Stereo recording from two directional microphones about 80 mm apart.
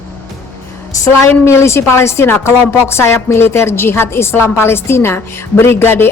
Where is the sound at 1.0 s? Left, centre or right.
Left.